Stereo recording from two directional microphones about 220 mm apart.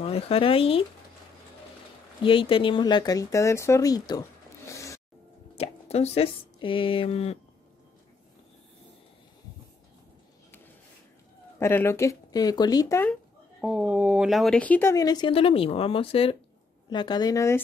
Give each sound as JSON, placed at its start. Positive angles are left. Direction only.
{"t": 0.0, "sound": "speech", "side_deg": 25}
{"t": 2.2, "sound": "speech", "side_deg": 25}
{"t": 5.6, "sound": "speech", "side_deg": 30}
{"t": 11.6, "sound": "speech", "side_deg": 10}
{"t": 13.6, "sound": "speech", "side_deg": -5}